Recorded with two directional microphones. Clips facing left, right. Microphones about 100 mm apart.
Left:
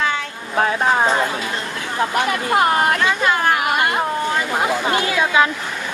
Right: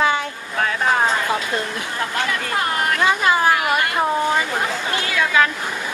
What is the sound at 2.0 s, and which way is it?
Speech, 25° left (ahead or behind).